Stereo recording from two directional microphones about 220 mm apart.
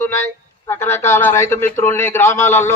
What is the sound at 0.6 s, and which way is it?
A man's voice, 10° left (ahead or behind).